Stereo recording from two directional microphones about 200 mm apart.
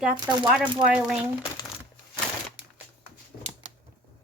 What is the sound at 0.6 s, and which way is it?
Speech, 5° right (ahead or behind).